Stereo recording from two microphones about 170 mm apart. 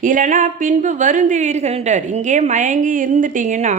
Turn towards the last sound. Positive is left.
turn(degrees=-50)  # may be behind; listen again after turning